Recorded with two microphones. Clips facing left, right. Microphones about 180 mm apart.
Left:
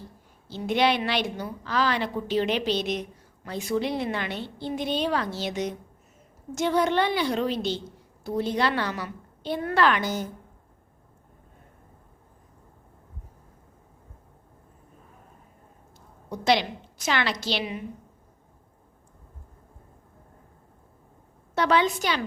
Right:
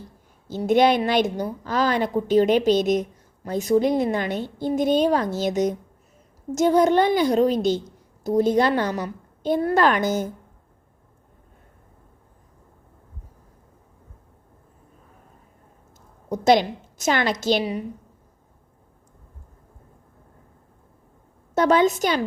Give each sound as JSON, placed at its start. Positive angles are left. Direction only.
{"t": 0.4, "sound": "a woman's voice", "side_deg": -45}
{"t": 16.3, "sound": "a woman's voice", "side_deg": -45}
{"t": 21.5, "sound": "a woman's voice", "side_deg": -45}